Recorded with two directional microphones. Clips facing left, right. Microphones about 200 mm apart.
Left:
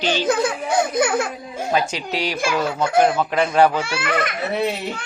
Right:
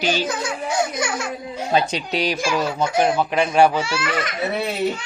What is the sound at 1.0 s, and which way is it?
Speech, 55° left (ahead or behind).